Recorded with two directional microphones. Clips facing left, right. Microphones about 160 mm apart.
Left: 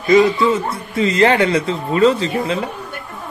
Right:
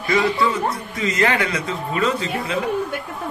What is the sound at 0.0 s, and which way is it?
A man's voice, 20° left (ahead or behind).